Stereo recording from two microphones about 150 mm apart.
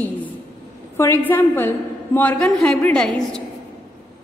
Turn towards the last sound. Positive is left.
turn(degrees=5)  # may be behind; listen again after turning